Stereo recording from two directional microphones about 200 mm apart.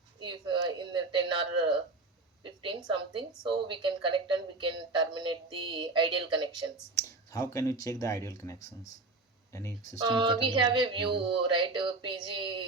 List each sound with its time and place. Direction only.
0.2 s a woman's voice: 25° right (ahead or behind)
6.9 s speech: 15° left (ahead or behind)
10.0 s a woman's voice: 25° right (ahead or behind)